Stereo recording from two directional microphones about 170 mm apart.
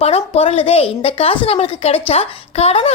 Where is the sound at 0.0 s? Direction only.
35° left (ahead or behind).